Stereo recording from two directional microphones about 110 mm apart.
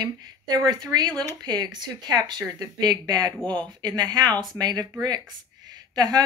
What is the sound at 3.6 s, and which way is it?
A woman's voice, 40° right (ahead or behind).